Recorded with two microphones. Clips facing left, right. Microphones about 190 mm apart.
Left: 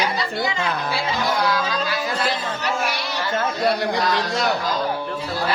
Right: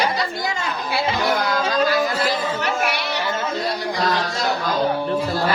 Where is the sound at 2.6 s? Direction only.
60° right (ahead or behind).